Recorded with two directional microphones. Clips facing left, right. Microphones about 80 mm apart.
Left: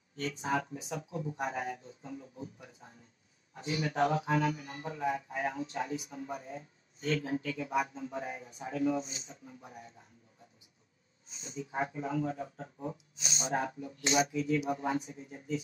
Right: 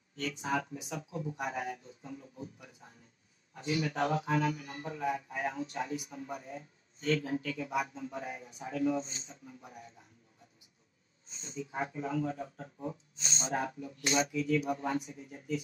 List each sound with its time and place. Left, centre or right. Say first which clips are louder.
0.1 s speech: left 1 dB; left
3.5 s a man's voice: left 1 dB; left
9.0 s speech: left 1 dB; right
9.6 s speech: left 1 dB; left
11.2 s a sound: left 1 dB; right
11.7 s a man's voice: left 1 dB; left
12.9 s speech: even; centre
13.5 s a man's voice: left 1 dB; left